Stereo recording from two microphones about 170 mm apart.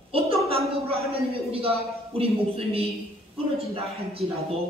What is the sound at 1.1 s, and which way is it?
A man's voice, 35° right (ahead or behind).